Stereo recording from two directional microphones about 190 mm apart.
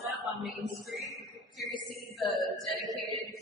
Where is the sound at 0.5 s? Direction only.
Centre (ahead or behind).